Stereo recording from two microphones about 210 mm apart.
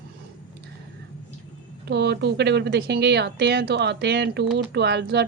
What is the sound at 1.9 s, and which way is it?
A woman's voice, 50° right (ahead or behind).